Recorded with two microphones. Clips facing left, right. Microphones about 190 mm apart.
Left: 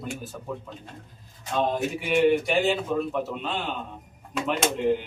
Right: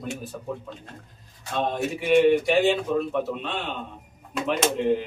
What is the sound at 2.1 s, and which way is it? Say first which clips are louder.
A man's voice: right 3 dB; centre (ahead or behind).